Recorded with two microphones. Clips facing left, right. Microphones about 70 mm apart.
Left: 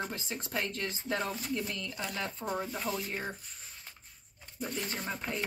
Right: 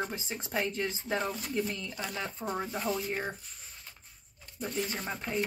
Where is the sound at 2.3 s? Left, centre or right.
Centre.